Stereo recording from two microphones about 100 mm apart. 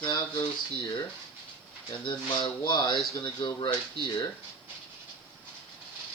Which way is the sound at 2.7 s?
50° left (ahead or behind).